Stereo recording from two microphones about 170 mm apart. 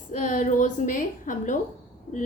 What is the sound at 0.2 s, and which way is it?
A woman's voice, 50° left (ahead or behind).